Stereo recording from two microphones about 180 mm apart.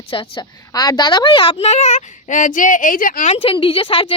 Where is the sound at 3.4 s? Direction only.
30° left (ahead or behind).